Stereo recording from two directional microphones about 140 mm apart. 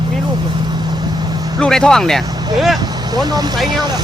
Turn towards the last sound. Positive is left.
turn(degrees=-30)  # may be behind; listen again after turning